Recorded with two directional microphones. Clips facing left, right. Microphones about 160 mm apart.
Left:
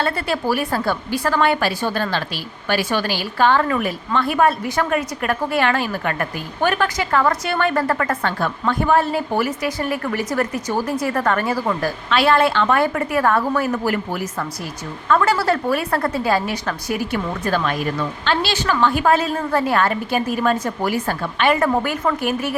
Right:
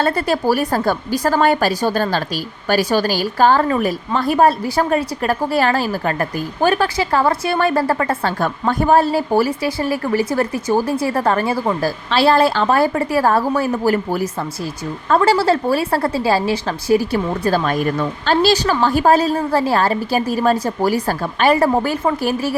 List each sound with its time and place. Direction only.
0.0 s a woman's voice: 40° right (ahead or behind)
8.4 s a woman's voice: 40° right (ahead or behind)